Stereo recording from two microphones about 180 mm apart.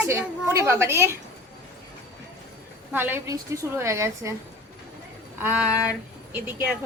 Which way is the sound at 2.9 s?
10° right (ahead or behind).